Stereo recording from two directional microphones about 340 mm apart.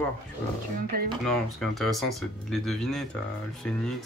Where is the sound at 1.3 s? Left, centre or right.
Centre.